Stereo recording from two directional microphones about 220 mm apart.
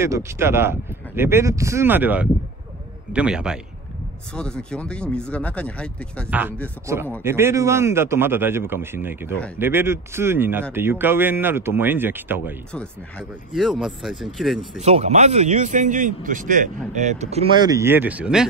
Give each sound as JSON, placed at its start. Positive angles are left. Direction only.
{"t": 0.0, "sound": "speech", "side_deg": -10}
{"t": 6.9, "sound": "speech", "side_deg": -15}
{"t": 14.8, "sound": "a man's voice", "side_deg": -30}
{"t": 17.6, "sound": "speech", "side_deg": -10}